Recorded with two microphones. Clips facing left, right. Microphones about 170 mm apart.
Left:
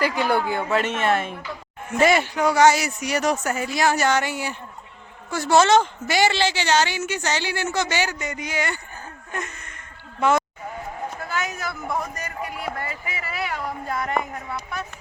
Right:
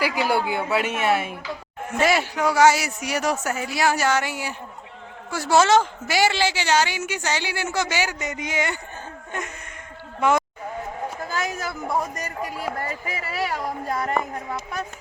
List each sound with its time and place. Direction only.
0.0 s a woman's voice: 10° right (ahead or behind)
8.2 s speech: 20° right (ahead or behind)
10.2 s speech: 15° right (ahead or behind)
11.3 s a man's voice: 35° right (ahead or behind)